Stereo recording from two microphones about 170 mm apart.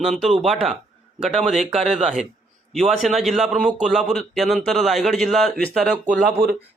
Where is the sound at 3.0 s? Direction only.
Centre (ahead or behind).